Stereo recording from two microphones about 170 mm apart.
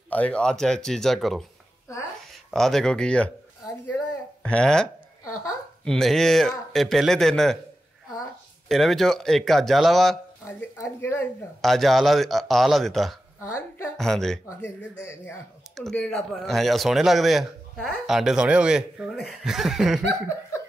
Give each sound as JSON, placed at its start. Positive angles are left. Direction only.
{"t": 0.1, "sound": "speech", "side_deg": 5}
{"t": 2.5, "sound": "speech", "side_deg": 0}
{"t": 3.6, "sound": "a sound", "side_deg": 10}
{"t": 5.9, "sound": "speech", "side_deg": 0}
{"t": 10.4, "sound": "speech", "side_deg": 15}
{"t": 11.6, "sound": "speech", "side_deg": 0}
{"t": 13.4, "sound": "speech", "side_deg": 15}
{"t": 13.9, "sound": "speech", "side_deg": 0}
{"t": 14.6, "sound": "speech", "side_deg": 15}
{"t": 15.7, "sound": "speech", "side_deg": 5}